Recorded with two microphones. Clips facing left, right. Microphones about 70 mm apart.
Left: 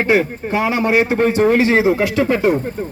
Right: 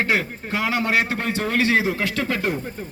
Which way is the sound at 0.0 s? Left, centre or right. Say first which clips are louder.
Left 7 dB; left.